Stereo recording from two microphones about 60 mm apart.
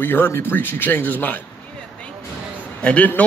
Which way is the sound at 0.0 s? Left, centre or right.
Left.